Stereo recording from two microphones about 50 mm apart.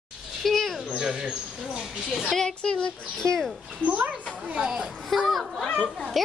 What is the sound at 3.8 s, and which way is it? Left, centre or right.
Speech, right.